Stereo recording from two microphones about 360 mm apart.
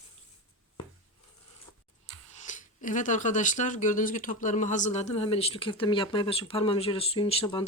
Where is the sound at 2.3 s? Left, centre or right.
Centre.